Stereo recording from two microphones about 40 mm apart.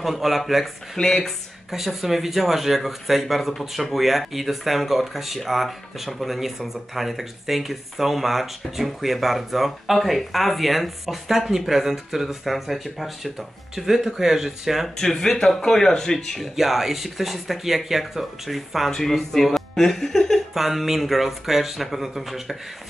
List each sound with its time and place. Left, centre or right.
0.0 s speech: centre
0.9 s speech: centre
1.7 s speech: centre
15.0 s speech: centre
16.5 s speech: centre
18.9 s speech: centre
20.5 s speech: centre